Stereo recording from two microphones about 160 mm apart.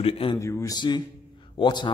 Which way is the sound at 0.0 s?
35° left (ahead or behind).